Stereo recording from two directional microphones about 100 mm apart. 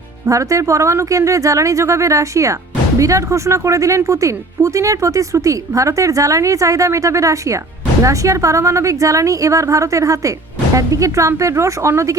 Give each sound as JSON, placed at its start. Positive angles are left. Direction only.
{"t": 0.3, "sound": "speech", "side_deg": -35}